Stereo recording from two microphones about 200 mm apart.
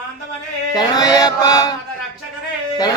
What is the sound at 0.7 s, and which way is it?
Male singing, 20° left (ahead or behind).